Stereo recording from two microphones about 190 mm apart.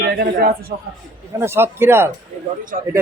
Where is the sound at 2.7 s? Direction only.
45° right (ahead or behind).